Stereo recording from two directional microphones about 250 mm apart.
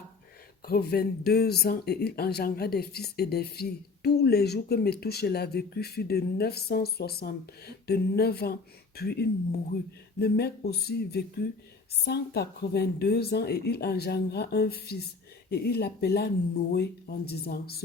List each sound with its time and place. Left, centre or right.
0.6 s speech: left